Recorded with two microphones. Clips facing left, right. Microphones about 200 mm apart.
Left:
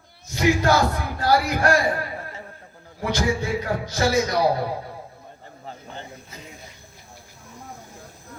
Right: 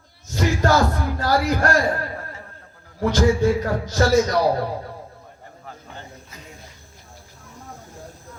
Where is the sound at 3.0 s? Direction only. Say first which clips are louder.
Right 6 dB; 45° right (ahead or behind).